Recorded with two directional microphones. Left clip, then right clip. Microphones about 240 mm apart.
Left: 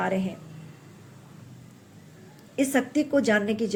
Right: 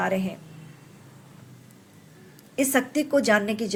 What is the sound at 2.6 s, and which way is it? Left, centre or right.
A woman's voice, right.